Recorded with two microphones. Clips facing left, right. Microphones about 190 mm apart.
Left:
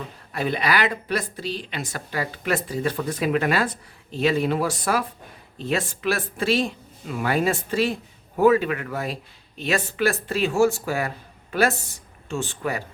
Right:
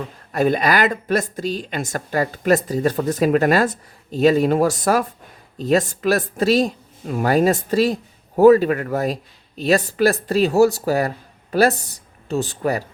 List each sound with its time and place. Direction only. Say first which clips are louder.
0.3 s speech: right 6 dB; 45° right (ahead or behind)